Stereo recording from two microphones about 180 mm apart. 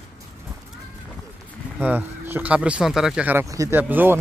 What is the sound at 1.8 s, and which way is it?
Speech, 10° right (ahead or behind).